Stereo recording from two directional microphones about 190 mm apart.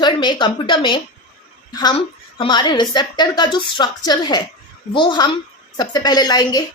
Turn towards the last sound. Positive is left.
turn(degrees=20)  # may be behind; listen again after turning